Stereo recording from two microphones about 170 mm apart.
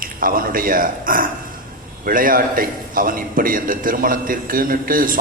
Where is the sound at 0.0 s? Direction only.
55° right (ahead or behind).